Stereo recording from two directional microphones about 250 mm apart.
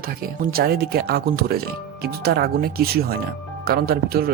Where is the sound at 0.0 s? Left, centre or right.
Right.